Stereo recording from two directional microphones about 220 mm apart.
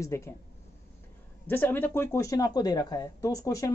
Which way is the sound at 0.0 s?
15° left (ahead or behind).